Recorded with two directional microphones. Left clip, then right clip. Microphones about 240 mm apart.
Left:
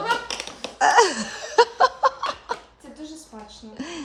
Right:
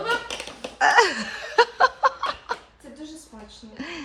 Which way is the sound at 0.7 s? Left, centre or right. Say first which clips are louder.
Left 1 dB; centre.